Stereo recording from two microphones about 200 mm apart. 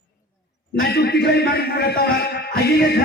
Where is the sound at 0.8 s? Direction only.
55° left (ahead or behind).